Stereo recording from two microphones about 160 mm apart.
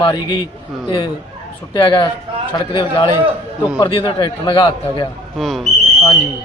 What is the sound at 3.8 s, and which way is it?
Speech, 35° left (ahead or behind).